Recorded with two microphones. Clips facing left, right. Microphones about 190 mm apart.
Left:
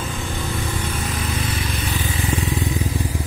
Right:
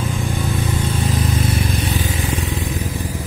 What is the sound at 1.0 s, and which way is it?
Vehicle, 45° right (ahead or behind).